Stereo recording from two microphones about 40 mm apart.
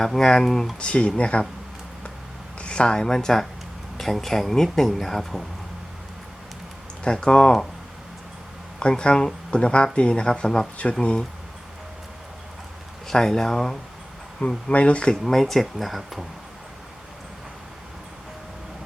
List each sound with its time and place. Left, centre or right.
0.0 s speech: centre
0.8 s speech: left
2.6 s speech: left; by 5.5 s centre
7.0 s speech: left
8.8 s speech: left
13.1 s speech: centre
14.4 s speech: left
15.1 s speech: centre